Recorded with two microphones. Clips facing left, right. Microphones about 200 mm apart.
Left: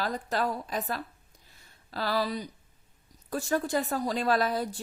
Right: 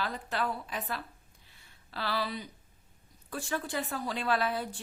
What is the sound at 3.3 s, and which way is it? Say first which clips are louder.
A woman's voice: left 7 dB; 40° left (ahead or behind).